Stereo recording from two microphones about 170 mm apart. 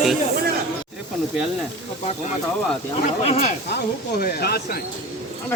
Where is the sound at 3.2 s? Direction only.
40° left (ahead or behind).